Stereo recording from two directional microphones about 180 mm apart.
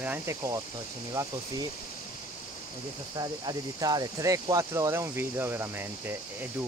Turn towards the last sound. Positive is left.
turn(degrees=-10)  # may be behind; listen again after turning